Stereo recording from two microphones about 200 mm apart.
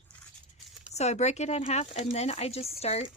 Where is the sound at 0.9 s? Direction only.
35° left (ahead or behind).